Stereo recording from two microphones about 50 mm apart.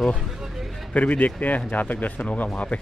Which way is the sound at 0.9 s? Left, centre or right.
Left.